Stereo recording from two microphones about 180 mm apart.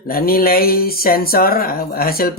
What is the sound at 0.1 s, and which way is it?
Speech, 55° left (ahead or behind).